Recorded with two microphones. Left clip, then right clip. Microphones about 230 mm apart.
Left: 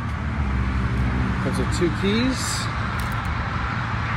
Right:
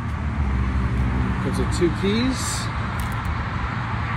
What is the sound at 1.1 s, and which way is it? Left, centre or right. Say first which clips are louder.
Vehicle: even; right.